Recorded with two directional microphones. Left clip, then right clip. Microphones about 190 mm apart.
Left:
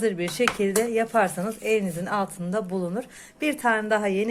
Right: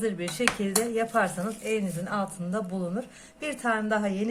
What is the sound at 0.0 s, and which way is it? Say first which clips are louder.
Speech: left 4 dB; 35° left (ahead or behind).